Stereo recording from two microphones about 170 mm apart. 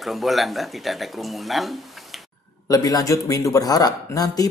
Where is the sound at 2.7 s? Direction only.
20° left (ahead or behind).